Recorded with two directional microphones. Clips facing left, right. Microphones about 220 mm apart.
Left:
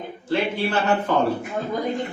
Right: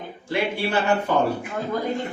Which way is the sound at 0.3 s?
10° right (ahead or behind).